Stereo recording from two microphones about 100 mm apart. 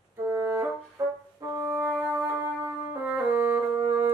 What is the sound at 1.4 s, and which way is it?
French horn, 20° right (ahead or behind).